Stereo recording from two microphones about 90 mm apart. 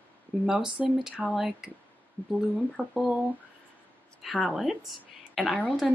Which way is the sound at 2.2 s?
20° left (ahead or behind).